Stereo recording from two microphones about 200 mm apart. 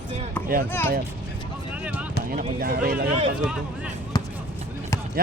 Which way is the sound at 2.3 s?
45° right (ahead or behind).